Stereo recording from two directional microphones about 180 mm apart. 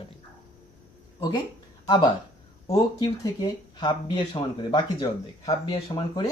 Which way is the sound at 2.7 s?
25° left (ahead or behind).